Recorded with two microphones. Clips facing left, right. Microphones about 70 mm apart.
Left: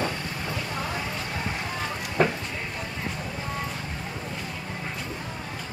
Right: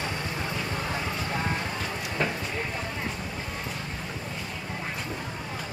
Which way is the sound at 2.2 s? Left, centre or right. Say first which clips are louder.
Left 6 dB; left.